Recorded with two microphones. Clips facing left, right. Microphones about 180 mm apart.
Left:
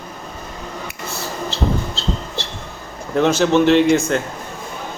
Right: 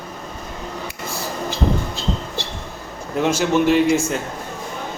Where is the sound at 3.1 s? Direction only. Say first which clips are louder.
Left 3 dB; 5° right (ahead or behind).